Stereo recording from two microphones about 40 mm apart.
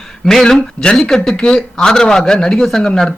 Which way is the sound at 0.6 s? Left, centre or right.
Left.